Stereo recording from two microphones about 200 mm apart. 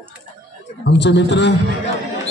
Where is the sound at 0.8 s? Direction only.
60° left (ahead or behind).